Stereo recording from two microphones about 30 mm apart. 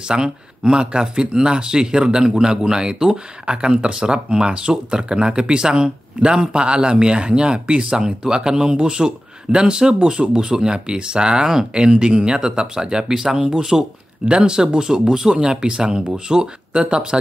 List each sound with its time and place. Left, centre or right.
0.1 s speech: right
13.4 s speech: right